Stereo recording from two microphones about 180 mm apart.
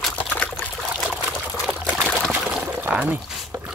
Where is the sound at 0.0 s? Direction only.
5° left (ahead or behind).